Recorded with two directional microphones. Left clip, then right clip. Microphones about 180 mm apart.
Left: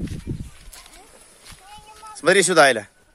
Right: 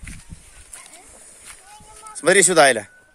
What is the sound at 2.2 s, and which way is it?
Speech, 10° right (ahead or behind).